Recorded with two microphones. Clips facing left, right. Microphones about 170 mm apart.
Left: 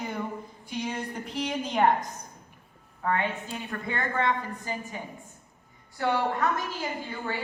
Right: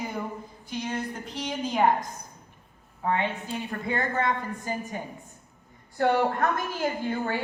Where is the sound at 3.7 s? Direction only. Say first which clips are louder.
Right 3 dB; 35° right (ahead or behind).